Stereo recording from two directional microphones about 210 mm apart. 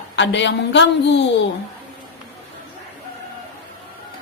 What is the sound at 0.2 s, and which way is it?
Speech, 60° left (ahead or behind).